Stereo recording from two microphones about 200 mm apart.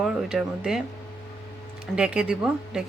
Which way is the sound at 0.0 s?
Centre (ahead or behind).